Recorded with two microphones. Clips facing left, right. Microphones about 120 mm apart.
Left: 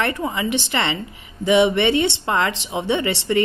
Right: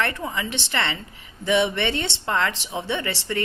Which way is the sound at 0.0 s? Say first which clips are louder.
Left 4 dB; 15° left (ahead or behind).